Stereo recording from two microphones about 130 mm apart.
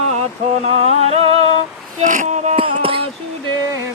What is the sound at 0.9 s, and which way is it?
Music, 55° right (ahead or behind).